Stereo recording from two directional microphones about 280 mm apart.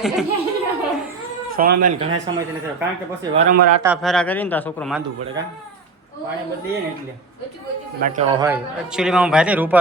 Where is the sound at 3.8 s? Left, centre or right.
Centre.